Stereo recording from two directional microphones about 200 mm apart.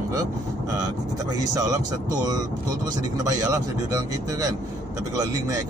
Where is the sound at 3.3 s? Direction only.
20° right (ahead or behind).